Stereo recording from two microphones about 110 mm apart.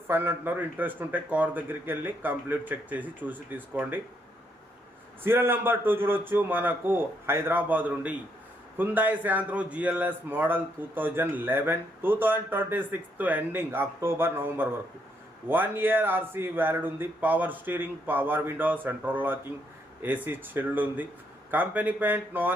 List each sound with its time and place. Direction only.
0.1 s a man's voice: 20° right (ahead or behind)
5.2 s a man's voice: 20° right (ahead or behind)